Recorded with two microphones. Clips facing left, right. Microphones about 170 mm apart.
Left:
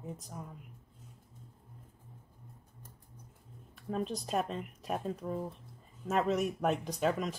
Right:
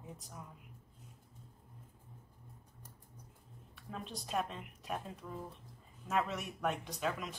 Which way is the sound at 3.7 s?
40° left (ahead or behind).